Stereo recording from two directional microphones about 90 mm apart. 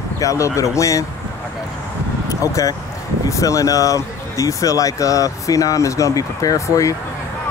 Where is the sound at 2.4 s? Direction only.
40° left (ahead or behind).